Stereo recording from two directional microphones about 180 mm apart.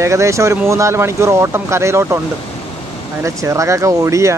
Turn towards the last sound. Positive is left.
turn(degrees=-15)  # may be behind; listen again after turning